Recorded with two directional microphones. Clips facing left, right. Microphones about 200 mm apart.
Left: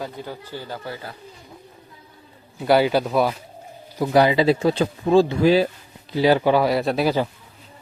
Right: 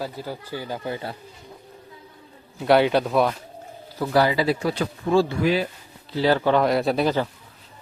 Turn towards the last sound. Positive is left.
turn(degrees=0)  # may be behind; listen again after turning